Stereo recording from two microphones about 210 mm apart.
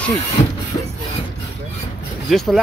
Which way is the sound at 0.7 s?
30° left (ahead or behind).